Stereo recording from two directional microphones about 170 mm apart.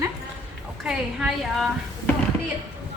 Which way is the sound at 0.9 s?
5° right (ahead or behind).